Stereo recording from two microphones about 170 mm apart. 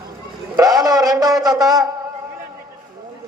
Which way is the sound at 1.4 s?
20° right (ahead or behind).